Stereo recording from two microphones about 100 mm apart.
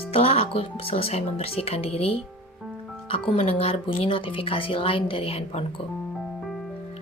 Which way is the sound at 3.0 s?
65° left (ahead or behind).